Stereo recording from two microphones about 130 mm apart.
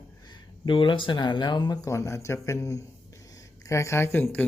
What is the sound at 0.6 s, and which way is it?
Speech, 40° left (ahead or behind).